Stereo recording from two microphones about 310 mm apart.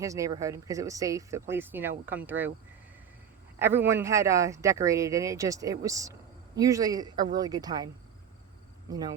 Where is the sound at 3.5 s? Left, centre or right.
Centre.